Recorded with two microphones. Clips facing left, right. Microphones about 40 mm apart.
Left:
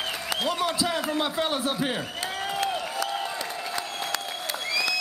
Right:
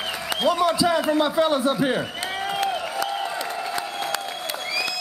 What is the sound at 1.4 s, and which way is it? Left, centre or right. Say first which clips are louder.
Speech: right 7 dB; centre.